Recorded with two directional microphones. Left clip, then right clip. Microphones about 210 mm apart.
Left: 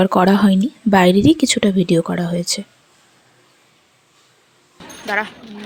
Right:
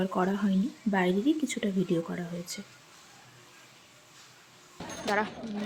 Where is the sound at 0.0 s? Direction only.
50° left (ahead or behind).